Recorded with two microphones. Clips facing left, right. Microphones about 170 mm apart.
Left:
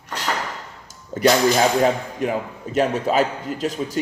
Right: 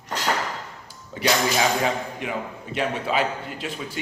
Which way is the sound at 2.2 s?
40° left (ahead or behind).